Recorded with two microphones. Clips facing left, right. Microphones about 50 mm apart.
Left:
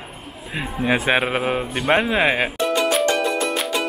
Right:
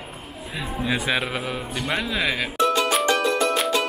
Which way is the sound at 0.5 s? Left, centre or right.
Left.